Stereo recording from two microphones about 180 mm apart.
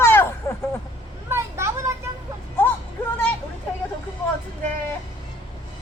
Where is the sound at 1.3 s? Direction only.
15° right (ahead or behind).